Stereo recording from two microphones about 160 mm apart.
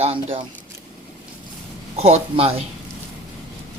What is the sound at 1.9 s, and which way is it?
Speech, 40° right (ahead or behind).